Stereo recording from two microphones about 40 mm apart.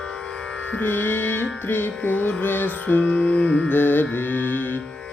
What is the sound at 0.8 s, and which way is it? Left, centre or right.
Music, left.